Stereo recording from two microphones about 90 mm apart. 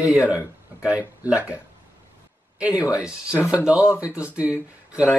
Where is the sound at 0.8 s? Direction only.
15° right (ahead or behind).